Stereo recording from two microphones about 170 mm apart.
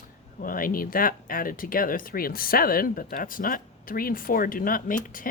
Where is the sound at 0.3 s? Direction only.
55° left (ahead or behind).